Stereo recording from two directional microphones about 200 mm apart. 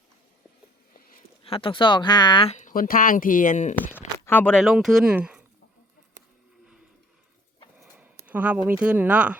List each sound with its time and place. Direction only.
1.5 s speech: 25° left (ahead or behind)
2.6 s speech: 45° left (ahead or behind)
3.8 s speech: 10° left (ahead or behind)
7.8 s speech: 10° right (ahead or behind)